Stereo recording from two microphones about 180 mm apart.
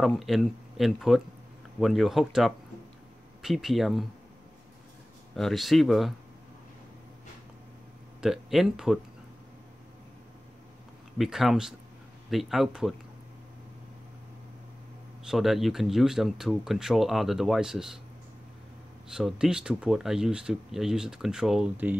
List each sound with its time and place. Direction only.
0.0 s speech: centre (ahead or behind)
5.3 s speech: centre (ahead or behind)
8.2 s speech: centre (ahead or behind)
11.1 s speech: centre (ahead or behind)
15.2 s speech: centre (ahead or behind)
19.0 s speech: 5° right (ahead or behind)